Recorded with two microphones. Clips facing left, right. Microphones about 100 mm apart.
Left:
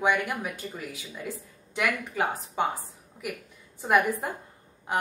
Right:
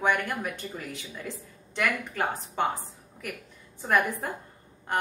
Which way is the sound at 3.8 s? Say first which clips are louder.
Left 2 dB; 15° left (ahead or behind).